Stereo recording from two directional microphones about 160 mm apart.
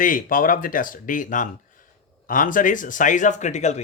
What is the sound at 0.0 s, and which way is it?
Speech, 60° left (ahead or behind).